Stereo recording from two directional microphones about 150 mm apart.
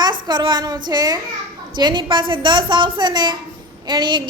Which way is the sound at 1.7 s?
30° right (ahead or behind).